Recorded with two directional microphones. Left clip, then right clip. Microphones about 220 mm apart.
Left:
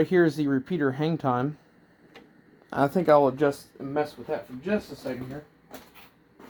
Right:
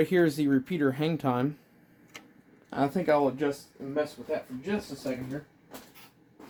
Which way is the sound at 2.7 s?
20° left (ahead or behind).